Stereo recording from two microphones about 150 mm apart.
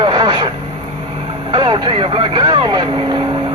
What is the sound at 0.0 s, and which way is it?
Radio, 30° right (ahead or behind).